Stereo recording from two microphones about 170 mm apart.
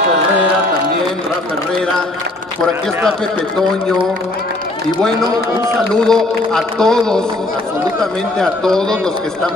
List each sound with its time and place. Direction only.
6.0 s a man's voice: 5° left (ahead or behind)